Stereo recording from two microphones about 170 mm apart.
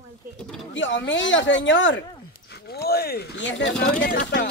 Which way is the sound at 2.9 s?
65° left (ahead or behind).